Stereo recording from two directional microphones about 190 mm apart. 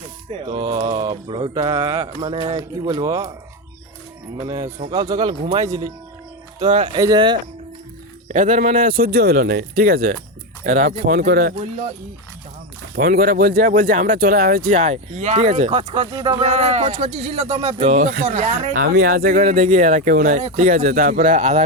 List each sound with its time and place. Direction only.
0.3 s speech: 25° right (ahead or behind)
4.4 s speech: 25° right (ahead or behind)
6.6 s speech: 35° right (ahead or behind)
6.9 s speech: 20° right (ahead or behind)
8.3 s speech: 45° right (ahead or behind)
13.0 s speech: 50° right (ahead or behind)